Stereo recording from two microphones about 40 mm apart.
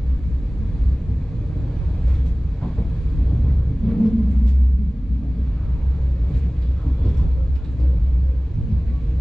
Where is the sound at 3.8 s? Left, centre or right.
Centre.